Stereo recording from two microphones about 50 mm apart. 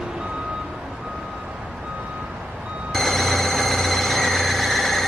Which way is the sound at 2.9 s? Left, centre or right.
Centre.